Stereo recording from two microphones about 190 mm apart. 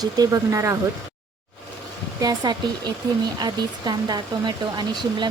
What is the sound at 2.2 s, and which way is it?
Speech, 20° right (ahead or behind).